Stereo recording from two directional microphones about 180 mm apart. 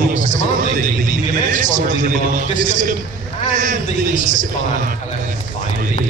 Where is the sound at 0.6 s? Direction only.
45° right (ahead or behind).